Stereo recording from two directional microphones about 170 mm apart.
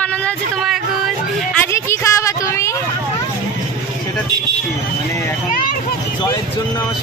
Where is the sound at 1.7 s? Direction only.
15° left (ahead or behind).